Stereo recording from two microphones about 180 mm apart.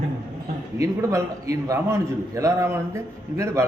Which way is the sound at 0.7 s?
15° right (ahead or behind).